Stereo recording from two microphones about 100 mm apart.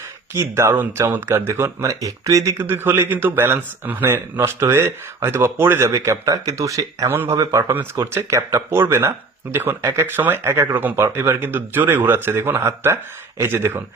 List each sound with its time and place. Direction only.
0.3 s speech: 25° right (ahead or behind)
7.1 s speech: 20° right (ahead or behind)